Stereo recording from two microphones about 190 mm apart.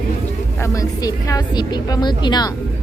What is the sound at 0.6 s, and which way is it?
A woman's voice, 15° left (ahead or behind).